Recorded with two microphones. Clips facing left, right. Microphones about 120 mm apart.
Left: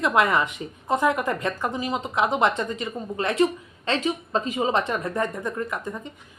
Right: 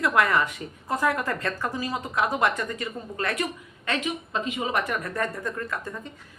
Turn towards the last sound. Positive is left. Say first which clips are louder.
# left 2 dB
turn(degrees=20)  # may be behind; listen again after turning